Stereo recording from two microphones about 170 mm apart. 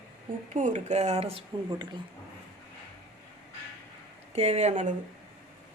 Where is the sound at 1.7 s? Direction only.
25° right (ahead or behind).